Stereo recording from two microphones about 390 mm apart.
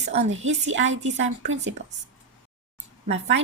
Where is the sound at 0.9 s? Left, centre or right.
Centre.